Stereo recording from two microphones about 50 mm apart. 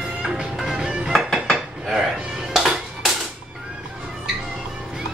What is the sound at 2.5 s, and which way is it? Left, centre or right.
Music, centre.